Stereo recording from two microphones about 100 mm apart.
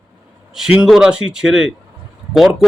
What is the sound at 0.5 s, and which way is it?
A man's voice, 5° right (ahead or behind).